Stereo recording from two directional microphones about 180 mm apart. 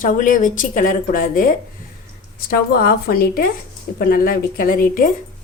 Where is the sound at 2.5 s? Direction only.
55° left (ahead or behind).